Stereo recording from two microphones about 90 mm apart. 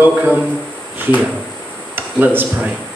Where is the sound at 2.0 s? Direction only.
20° right (ahead or behind).